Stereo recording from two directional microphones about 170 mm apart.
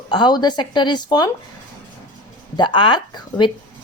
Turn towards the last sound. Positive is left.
turn(degrees=25)  # may be behind; listen again after turning